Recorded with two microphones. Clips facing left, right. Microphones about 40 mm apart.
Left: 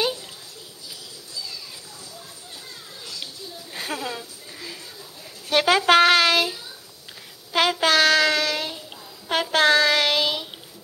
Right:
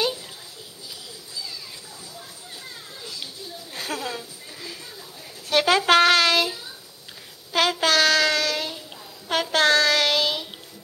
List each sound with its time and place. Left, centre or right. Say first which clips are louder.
3.0 s children playing: even; centre
3.7 s a sound: even; centre
5.5 s a child's voice: left 1 dB; centre
7.5 s child singing: left 1 dB; centre